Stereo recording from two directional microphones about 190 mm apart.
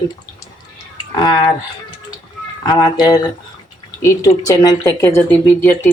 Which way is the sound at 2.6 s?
20° left (ahead or behind).